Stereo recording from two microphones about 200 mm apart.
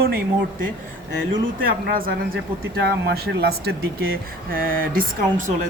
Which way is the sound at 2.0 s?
45° right (ahead or behind).